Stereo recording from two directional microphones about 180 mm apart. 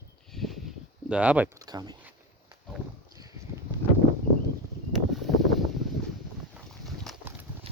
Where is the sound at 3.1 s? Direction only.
20° right (ahead or behind).